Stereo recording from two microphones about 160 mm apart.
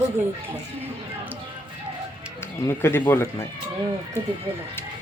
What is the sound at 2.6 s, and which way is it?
Speech, 15° left (ahead or behind).